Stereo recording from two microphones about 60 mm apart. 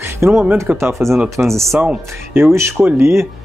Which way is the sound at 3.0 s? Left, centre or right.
Right.